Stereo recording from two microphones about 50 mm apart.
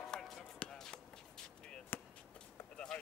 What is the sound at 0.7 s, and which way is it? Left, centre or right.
Basketball bounce, centre.